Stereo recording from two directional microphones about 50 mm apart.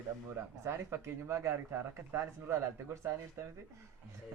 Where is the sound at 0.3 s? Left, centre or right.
Right.